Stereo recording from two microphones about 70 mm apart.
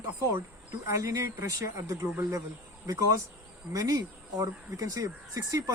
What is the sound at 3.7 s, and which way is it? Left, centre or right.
Speech, right.